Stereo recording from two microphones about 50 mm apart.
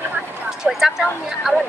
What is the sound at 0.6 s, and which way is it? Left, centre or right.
Speech, centre.